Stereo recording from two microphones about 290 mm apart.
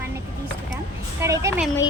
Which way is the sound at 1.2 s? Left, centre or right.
Centre.